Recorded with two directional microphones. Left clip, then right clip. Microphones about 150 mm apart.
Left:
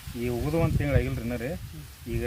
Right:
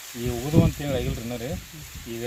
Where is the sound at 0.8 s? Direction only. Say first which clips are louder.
Even; 10° right (ahead or behind).